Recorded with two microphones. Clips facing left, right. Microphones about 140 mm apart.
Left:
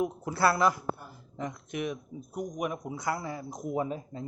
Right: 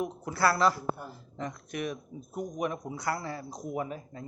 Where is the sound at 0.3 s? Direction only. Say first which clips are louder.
Even; 20° left (ahead or behind).